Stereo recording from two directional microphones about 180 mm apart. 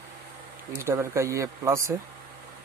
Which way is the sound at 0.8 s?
15° right (ahead or behind).